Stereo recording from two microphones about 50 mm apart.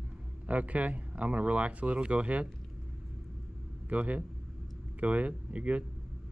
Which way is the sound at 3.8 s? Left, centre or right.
Right.